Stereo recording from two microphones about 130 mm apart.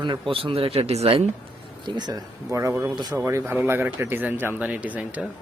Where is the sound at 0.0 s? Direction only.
40° right (ahead or behind).